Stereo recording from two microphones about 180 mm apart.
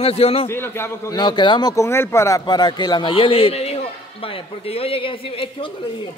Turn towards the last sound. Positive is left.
turn(degrees=30)  # may be behind; listen again after turning